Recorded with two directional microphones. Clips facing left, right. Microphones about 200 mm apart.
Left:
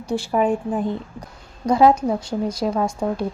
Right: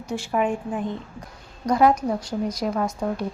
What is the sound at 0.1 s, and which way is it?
A woman's voice, 30° left (ahead or behind).